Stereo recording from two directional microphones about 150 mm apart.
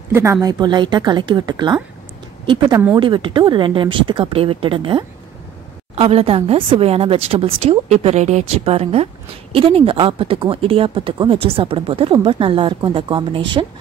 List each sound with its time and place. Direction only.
0.1 s a woman's voice: 20° right (ahead or behind); by 13.7 s 35° right (ahead or behind)